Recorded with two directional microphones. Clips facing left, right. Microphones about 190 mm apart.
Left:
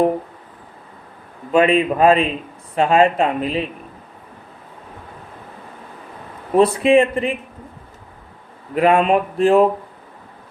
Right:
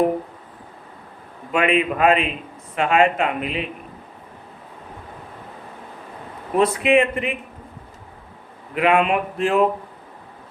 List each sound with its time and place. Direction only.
1.5 s speech: 35° left (ahead or behind)
6.6 s speech: 30° left (ahead or behind)
8.7 s speech: 35° left (ahead or behind)